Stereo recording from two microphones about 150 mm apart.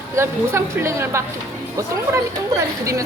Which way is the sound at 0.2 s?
20° right (ahead or behind).